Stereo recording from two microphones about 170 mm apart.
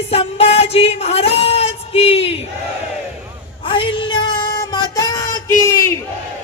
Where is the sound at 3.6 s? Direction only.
30° left (ahead or behind).